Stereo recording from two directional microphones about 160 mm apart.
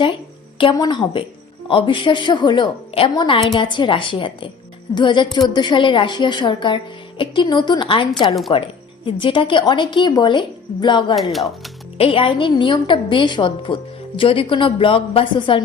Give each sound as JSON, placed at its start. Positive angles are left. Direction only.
{"t": 0.6, "sound": "a woman's voice", "side_deg": 30}
{"t": 11.1, "sound": "speech", "side_deg": 0}
{"t": 11.9, "sound": "a woman's voice", "side_deg": 35}